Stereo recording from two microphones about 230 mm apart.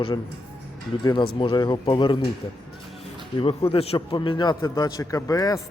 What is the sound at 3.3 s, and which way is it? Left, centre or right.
A man's voice, left.